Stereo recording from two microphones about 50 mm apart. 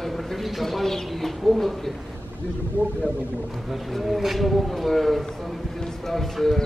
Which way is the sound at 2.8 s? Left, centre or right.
Left.